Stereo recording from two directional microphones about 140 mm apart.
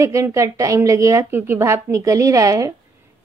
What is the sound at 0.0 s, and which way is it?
A woman's voice, 20° right (ahead or behind).